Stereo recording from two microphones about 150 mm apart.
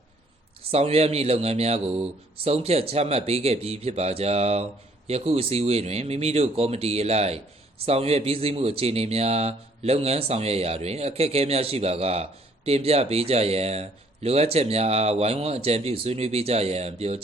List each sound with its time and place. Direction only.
0.7 s a man's voice: 45° right (ahead or behind)